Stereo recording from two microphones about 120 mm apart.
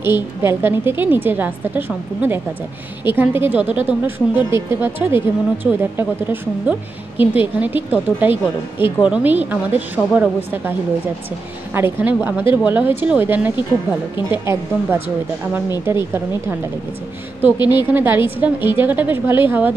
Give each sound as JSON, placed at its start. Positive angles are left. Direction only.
{"t": 0.0, "sound": "speech", "side_deg": -20}
{"t": 11.7, "sound": "speech", "side_deg": -15}
{"t": 17.6, "sound": "speech", "side_deg": -15}